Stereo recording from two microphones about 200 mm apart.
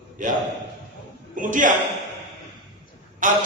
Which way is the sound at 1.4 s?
40° right (ahead or behind).